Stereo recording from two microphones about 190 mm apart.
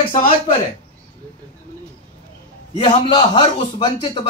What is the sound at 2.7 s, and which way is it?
A man's voice, 25° left (ahead or behind).